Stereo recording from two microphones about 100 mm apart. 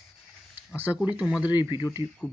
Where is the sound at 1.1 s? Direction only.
10° right (ahead or behind).